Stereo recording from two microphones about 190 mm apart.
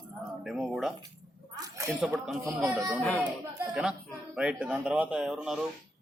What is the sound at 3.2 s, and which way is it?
Speech, 5° right (ahead or behind).